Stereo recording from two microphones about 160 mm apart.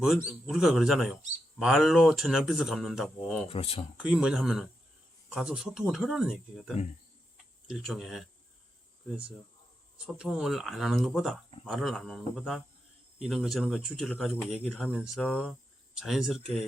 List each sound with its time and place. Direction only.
0.3 s speech: centre (ahead or behind)
3.5 s speech: 35° left (ahead or behind)
3.9 s speech: 5° right (ahead or behind)
10.2 s speech: 5° right (ahead or behind)
16.0 s speech: centre (ahead or behind)